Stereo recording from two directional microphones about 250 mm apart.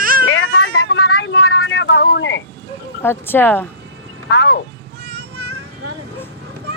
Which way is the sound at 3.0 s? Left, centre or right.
Centre.